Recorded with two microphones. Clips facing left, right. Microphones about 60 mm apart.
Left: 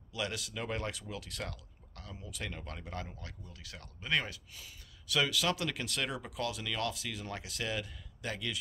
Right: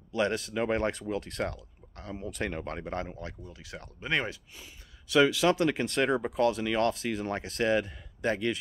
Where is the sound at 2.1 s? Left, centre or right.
Right.